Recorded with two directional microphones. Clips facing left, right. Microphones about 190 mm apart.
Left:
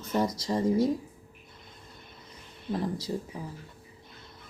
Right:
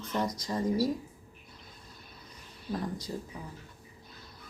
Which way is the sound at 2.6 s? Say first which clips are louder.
Left 4 dB; 25° left (ahead or behind).